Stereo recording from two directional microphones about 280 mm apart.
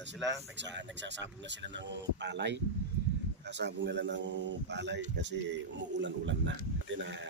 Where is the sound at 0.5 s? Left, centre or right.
Right.